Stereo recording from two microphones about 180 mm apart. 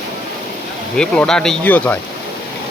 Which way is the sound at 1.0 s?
5° left (ahead or behind).